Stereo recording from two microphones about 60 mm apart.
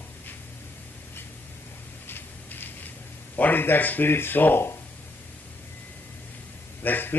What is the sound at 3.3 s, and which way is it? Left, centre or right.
Speech, left.